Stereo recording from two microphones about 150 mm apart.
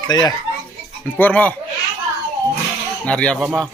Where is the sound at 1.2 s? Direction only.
10° left (ahead or behind).